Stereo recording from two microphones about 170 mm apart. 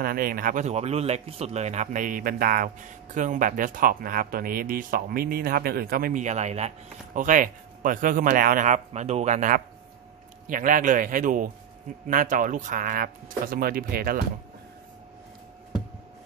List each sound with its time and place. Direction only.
0.0 s speech: 55° right (ahead or behind)